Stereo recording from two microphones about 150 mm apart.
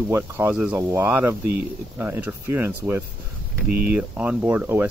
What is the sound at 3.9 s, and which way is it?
Speech, 10° right (ahead or behind).